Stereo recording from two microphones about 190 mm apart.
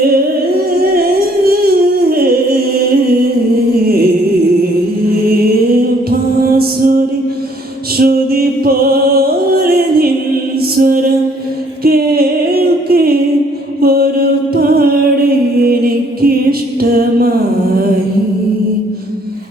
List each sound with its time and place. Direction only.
1.5 s a sound: 55° right (ahead or behind)
3.8 s music: 55° right (ahead or behind)
6.6 s music: 50° right (ahead or behind)
11.8 s a sound: 55° right (ahead or behind)
13.8 s mantra: 50° right (ahead or behind)
15.6 s music: 50° right (ahead or behind)